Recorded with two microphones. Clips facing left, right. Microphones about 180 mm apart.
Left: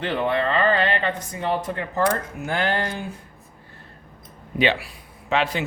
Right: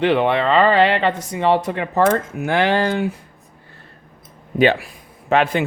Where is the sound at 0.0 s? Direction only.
75° right (ahead or behind).